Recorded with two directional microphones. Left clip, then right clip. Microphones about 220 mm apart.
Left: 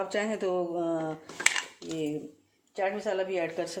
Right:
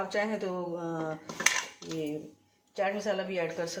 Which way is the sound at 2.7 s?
35° left (ahead or behind).